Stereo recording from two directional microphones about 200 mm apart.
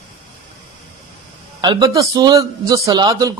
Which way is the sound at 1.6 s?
20° right (ahead or behind).